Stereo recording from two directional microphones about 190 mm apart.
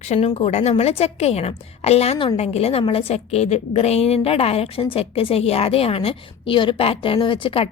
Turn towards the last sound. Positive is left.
turn(degrees=30)  # may be behind; listen again after turning